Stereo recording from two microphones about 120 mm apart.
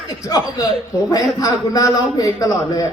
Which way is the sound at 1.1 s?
30° left (ahead or behind).